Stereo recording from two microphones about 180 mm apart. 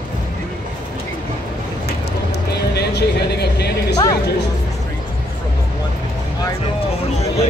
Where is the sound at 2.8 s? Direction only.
65° left (ahead or behind).